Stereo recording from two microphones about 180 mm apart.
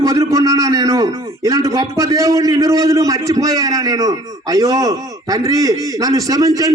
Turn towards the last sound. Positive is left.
turn(degrees=-20)  # may be behind; listen again after turning